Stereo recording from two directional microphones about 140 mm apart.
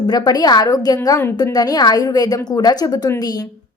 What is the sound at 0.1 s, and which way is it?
A woman's voice, 30° left (ahead or behind).